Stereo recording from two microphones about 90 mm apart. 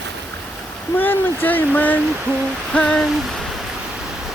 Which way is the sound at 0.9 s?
20° left (ahead or behind).